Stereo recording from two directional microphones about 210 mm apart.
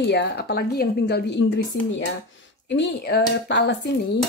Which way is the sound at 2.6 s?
55° left (ahead or behind).